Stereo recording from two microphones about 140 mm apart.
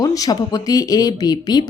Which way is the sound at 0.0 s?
25° left (ahead or behind).